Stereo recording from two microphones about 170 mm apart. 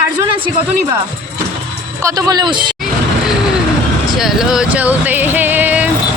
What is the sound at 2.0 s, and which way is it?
Speech, 20° right (ahead or behind).